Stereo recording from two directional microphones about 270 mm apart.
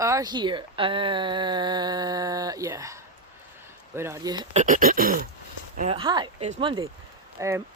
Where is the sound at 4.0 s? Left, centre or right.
Centre.